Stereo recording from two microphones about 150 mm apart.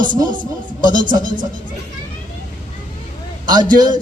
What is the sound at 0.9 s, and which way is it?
Speech, 60° right (ahead or behind).